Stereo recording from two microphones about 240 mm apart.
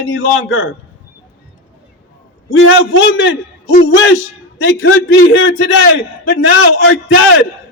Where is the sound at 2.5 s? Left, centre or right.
Left.